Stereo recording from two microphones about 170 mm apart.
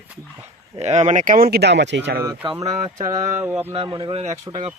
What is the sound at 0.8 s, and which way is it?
Speech, 40° right (ahead or behind).